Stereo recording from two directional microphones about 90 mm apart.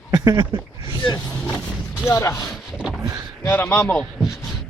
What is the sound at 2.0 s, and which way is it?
Speech, 35° left (ahead or behind).